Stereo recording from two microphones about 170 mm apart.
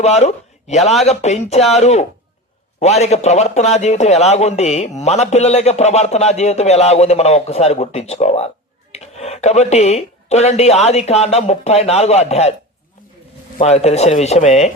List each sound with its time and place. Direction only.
0.0 s a man's voice: 40° left (ahead or behind)
13.6 s a man's voice: 40° left (ahead or behind)